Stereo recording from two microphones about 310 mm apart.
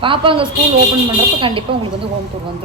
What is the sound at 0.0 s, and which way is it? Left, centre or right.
A woman's voice, centre.